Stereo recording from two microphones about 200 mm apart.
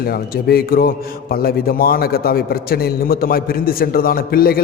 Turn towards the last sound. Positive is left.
turn(degrees=50)  # may be behind; listen again after turning